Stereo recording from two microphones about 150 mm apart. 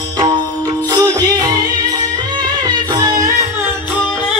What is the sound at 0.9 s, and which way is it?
Music, 25° right (ahead or behind).